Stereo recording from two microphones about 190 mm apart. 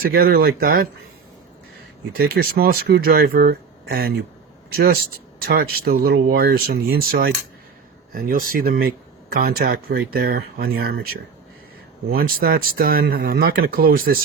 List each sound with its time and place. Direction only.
0.0 s speech: 55° right (ahead or behind)
2.1 s speech: 50° right (ahead or behind)
12.1 s speech: 50° right (ahead or behind)